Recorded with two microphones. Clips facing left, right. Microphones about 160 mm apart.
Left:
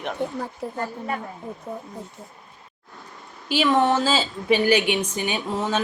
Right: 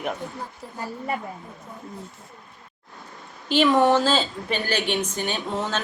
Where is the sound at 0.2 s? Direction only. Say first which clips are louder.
Left 8 dB; 70° left (ahead or behind).